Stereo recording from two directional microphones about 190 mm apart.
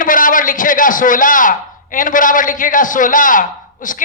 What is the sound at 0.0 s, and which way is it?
A man's voice, 45° left (ahead or behind).